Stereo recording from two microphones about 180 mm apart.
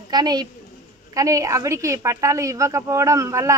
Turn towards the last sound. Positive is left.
turn(degrees=-15)  # may be behind; listen again after turning